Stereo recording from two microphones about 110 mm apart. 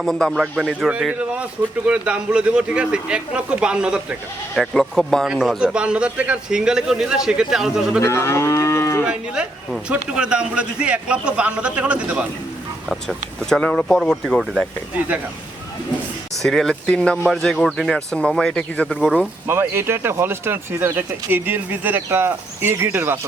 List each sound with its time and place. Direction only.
0.0 s speech: 5° left (ahead or behind)
4.5 s speech: 5° left (ahead or behind)
8.0 s moo: 25° left (ahead or behind)
9.0 s speech: 5° right (ahead or behind)
12.9 s speech: 5° left (ahead or behind)
16.3 s speech: centre (ahead or behind)
19.5 s speech: 20° right (ahead or behind)